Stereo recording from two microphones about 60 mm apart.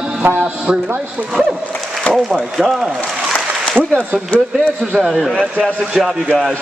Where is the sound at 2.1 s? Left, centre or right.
Centre.